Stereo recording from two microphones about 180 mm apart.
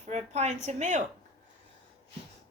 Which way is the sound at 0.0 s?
40° right (ahead or behind).